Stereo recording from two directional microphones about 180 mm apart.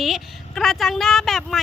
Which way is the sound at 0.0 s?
Centre (ahead or behind).